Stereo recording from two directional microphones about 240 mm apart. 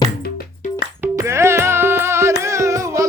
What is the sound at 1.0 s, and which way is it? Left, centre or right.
Music, centre.